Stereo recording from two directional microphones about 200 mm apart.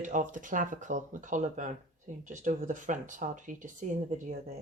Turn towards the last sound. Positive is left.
turn(degrees=-40)  # may be behind; listen again after turning